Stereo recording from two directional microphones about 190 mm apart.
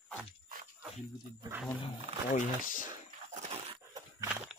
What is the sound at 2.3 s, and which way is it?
Speech, 45° left (ahead or behind).